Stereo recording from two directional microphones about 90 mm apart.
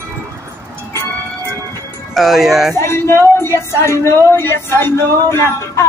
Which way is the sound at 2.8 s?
30° left (ahead or behind).